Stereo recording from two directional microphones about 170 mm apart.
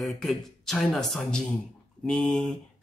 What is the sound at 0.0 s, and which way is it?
Speech, centre (ahead or behind).